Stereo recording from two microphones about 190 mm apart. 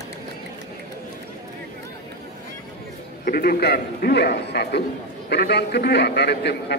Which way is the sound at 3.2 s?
50° left (ahead or behind).